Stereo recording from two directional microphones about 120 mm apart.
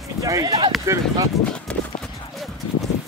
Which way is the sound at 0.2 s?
30° right (ahead or behind).